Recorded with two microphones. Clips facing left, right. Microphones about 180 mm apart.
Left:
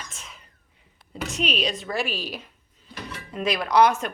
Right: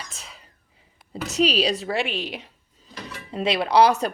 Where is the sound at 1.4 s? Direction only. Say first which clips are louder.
Right 7 dB; 35° right (ahead or behind).